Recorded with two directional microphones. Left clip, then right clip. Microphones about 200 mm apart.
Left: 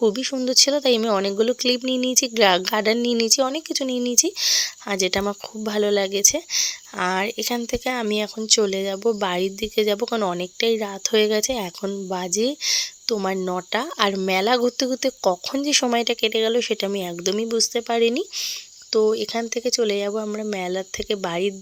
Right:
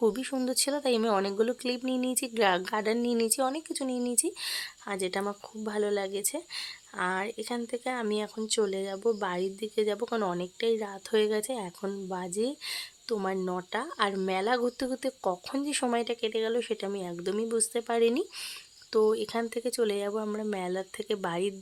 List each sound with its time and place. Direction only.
0.0 s speech: 25° left (ahead or behind)